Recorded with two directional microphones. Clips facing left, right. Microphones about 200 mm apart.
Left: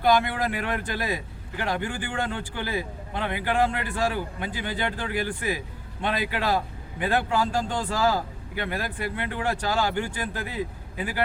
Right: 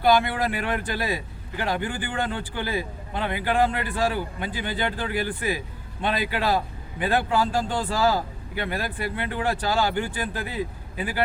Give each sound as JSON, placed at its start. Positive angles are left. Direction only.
{"t": 0.1, "sound": "a man's voice", "side_deg": -30}